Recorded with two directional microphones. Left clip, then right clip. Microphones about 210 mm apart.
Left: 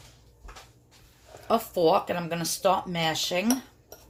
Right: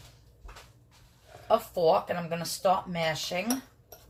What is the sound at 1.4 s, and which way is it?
Speech, 50° left (ahead or behind).